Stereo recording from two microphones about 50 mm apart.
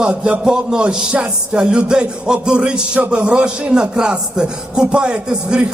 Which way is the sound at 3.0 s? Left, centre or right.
Right.